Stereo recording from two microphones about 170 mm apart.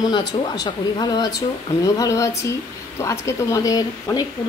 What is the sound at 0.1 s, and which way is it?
Speech, 25° left (ahead or behind).